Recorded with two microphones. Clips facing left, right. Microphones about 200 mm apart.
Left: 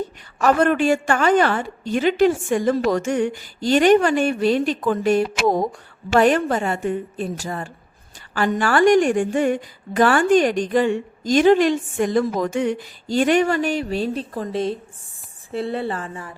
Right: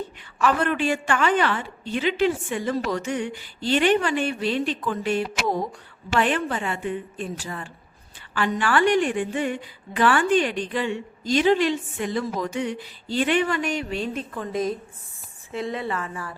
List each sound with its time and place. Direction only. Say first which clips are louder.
0.3 s a woman's voice: left 5 dB; 45° left (ahead or behind)